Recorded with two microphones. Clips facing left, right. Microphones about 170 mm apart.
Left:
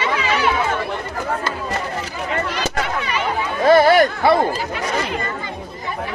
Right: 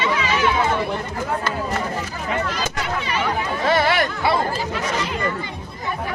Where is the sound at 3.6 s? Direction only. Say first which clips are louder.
Left 8 dB; 45° left (ahead or behind).